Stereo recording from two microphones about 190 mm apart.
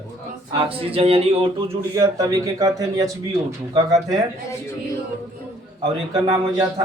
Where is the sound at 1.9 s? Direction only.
15° right (ahead or behind).